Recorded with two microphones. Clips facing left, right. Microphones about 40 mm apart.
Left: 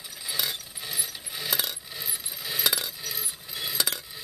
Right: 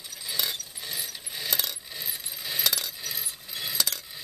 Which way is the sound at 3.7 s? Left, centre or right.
Centre.